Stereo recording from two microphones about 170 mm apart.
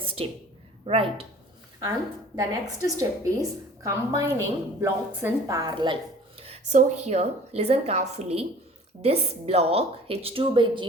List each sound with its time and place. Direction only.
0.0 s a sound: 35° right (ahead or behind)
0.9 s a woman's voice: 35° right (ahead or behind)
2.3 s a woman's voice: 20° right (ahead or behind)
6.4 s a woman's voice: 40° right (ahead or behind)